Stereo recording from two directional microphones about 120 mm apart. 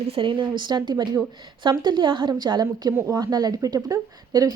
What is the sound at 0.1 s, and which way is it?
A woman's voice, 45° right (ahead or behind).